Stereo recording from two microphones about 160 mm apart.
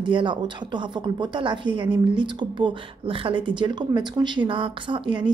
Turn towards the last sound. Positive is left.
turn(degrees=-30)  # may be behind; listen again after turning